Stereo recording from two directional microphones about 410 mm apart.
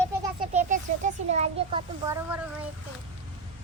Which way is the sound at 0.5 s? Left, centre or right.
Centre.